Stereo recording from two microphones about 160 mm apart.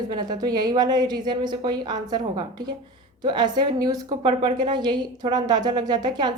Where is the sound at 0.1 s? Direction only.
25° right (ahead or behind).